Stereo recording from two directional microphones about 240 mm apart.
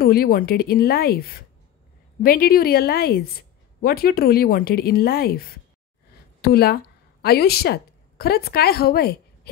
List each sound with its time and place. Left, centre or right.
0.0 s a woman's voice: left